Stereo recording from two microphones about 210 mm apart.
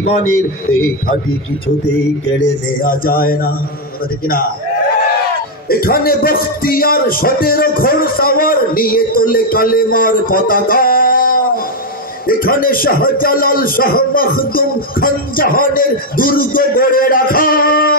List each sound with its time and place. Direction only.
0.7 s a man's voice: 75° left (ahead or behind)
2.8 s a man's voice: 40° left (ahead or behind)
5.7 s a man's voice: 45° left (ahead or behind)